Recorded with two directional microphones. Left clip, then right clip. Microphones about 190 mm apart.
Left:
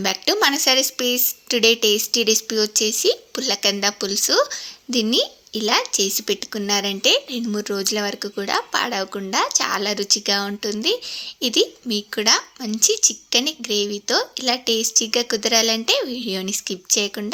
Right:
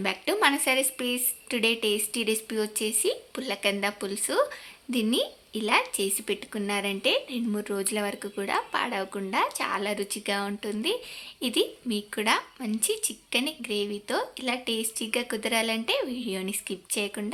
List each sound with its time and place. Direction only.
0.0 s a woman's voice: 25° left (ahead or behind)